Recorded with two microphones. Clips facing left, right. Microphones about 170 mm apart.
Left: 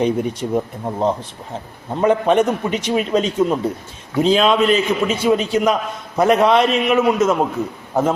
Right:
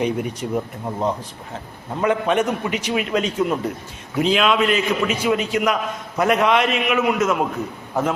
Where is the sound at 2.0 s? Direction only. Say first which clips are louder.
Left 4 dB; 35° left (ahead or behind).